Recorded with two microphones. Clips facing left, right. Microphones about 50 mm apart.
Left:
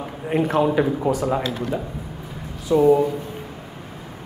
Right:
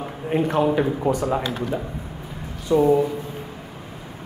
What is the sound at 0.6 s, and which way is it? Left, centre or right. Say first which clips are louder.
Speech: left 2 dB; centre.